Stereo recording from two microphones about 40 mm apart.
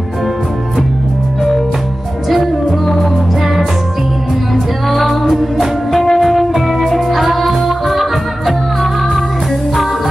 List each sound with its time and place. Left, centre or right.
2.2 s music: centre
4.8 s music: centre